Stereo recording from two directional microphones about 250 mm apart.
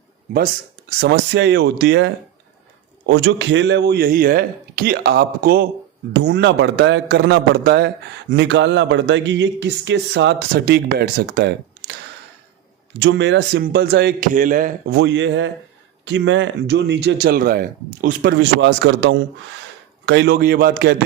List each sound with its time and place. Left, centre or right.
0.9 s a man's voice: right
13.0 s a man's voice: right